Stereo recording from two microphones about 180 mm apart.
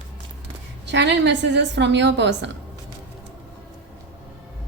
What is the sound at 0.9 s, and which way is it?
A woman's voice, 75° right (ahead or behind).